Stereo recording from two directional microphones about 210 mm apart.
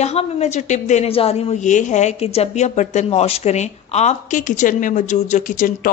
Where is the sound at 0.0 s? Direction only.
30° left (ahead or behind).